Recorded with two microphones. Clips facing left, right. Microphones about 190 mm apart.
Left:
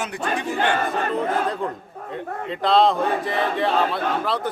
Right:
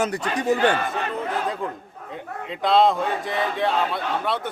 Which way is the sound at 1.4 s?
Centre (ahead or behind).